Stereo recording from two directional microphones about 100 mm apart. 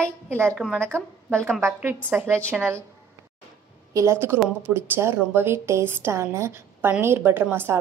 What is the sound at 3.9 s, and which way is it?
A woman's voice, 30° right (ahead or behind).